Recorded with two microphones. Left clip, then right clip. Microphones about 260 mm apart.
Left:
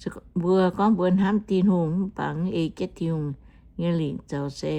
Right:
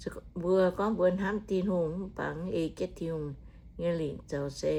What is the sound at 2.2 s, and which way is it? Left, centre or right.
Speech, left.